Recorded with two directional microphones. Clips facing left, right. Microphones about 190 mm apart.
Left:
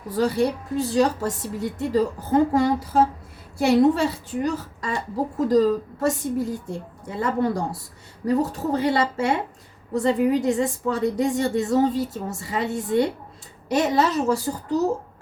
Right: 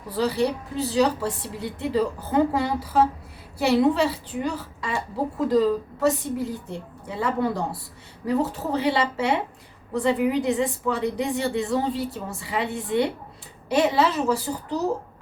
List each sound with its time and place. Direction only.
0.1 s a woman's voice: 50° left (ahead or behind)